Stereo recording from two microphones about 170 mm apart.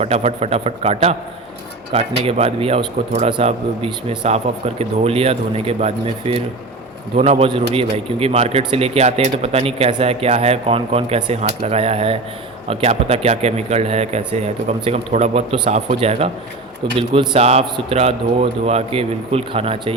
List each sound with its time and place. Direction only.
0.0 s speech: 40° right (ahead or behind)